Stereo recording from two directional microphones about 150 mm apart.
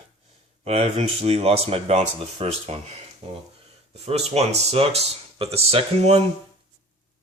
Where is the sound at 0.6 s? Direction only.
45° right (ahead or behind).